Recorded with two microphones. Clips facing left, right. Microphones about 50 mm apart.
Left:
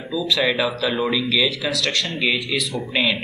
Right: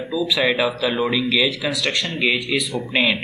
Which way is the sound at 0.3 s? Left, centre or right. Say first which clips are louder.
Even; centre.